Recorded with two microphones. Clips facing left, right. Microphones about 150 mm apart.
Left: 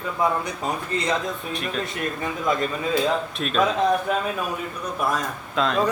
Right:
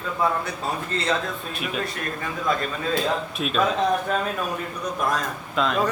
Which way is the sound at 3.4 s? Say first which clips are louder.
Right 1 dB; 5° right (ahead or behind).